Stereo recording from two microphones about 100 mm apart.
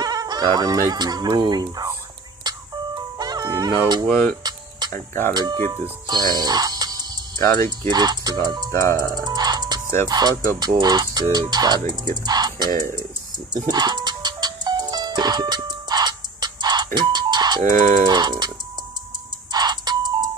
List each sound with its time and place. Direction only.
0.0 s fowl: 45° right (ahead or behind)
3.2 s music: 40° right (ahead or behind)
5.3 s speech: 45° right (ahead or behind)
7.3 s speech: 35° left (ahead or behind)
7.9 s speech: 45° right (ahead or behind)
8.7 s speech: 30° left (ahead or behind)
9.1 s music: 45° right (ahead or behind)
10.0 s speech: 45° right (ahead or behind)
13.5 s music: 45° right (ahead or behind)
19.5 s music: 45° right (ahead or behind)